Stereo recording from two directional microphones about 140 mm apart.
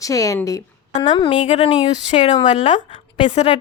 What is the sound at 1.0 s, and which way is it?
Speech, 35° left (ahead or behind).